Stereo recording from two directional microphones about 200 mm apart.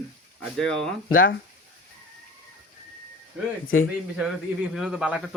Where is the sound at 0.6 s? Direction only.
5° left (ahead or behind).